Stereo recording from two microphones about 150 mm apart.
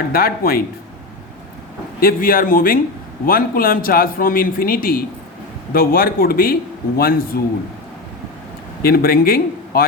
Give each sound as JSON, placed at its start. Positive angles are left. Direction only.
{"t": 0.1, "sound": "speech", "side_deg": 85}
{"t": 2.0, "sound": "a man's voice", "side_deg": 75}
{"t": 8.8, "sound": "a man's voice", "side_deg": 80}